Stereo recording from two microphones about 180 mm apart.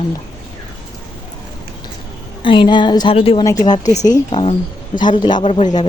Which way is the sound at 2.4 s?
25° left (ahead or behind).